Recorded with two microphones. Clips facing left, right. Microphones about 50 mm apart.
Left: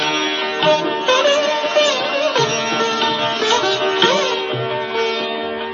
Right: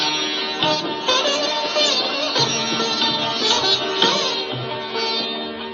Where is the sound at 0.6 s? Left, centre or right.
Left.